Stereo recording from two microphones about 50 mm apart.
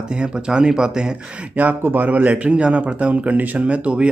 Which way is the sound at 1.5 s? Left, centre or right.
Right.